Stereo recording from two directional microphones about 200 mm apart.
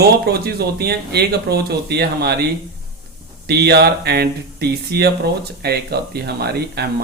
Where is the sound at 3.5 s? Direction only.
55° right (ahead or behind).